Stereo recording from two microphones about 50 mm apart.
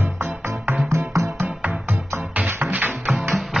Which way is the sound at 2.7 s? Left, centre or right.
Right.